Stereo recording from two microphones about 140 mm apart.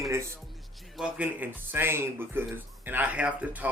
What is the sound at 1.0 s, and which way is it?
Speech, 10° right (ahead or behind).